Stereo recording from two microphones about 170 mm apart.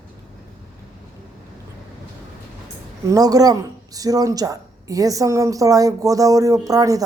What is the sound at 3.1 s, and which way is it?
A woman's voice, 20° right (ahead or behind).